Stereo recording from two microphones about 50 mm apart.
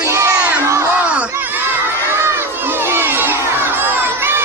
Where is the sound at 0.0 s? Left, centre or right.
Right.